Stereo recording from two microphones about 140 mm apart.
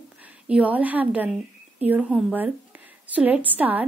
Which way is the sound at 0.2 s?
10° right (ahead or behind).